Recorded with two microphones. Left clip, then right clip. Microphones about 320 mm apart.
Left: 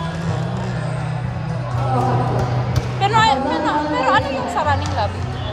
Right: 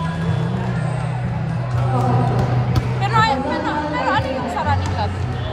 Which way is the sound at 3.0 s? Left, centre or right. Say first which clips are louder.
Left 3 dB; left.